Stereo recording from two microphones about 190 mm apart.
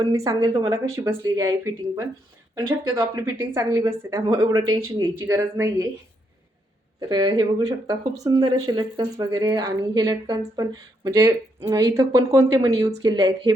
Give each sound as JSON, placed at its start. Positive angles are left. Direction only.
{"t": 0.0, "sound": "a woman's voice", "side_deg": -15}
{"t": 3.0, "sound": "a woman's voice", "side_deg": -15}
{"t": 7.1, "sound": "speech", "side_deg": -20}